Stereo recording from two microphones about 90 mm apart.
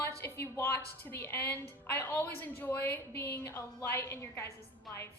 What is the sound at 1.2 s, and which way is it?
A woman's voice, 20° left (ahead or behind).